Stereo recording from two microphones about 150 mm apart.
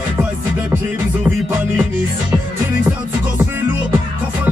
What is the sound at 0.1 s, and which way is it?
Music, 10° right (ahead or behind).